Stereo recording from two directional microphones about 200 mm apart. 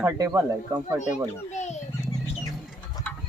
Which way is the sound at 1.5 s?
35° left (ahead or behind).